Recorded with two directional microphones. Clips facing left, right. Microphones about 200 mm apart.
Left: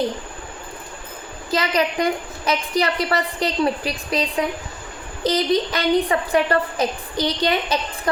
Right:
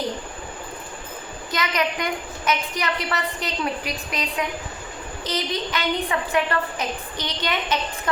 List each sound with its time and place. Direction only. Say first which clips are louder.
1.5 s a woman's voice: left 4 dB; 30° left (ahead or behind)